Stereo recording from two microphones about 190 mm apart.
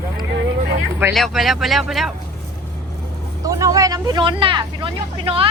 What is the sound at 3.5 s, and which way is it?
Speech, 15° right (ahead or behind).